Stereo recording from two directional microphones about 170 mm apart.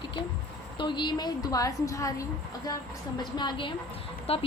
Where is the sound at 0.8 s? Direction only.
25° left (ahead or behind).